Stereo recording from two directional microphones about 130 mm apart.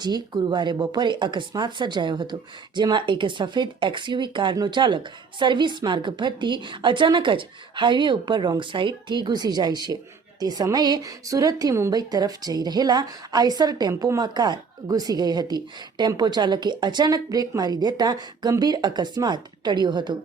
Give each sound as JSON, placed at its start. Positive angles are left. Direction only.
{"t": 0.0, "sound": "speech", "side_deg": -35}